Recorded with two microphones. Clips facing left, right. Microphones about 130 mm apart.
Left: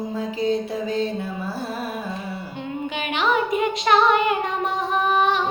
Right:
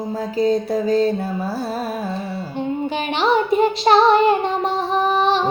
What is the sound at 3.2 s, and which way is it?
Child singing, 35° right (ahead or behind).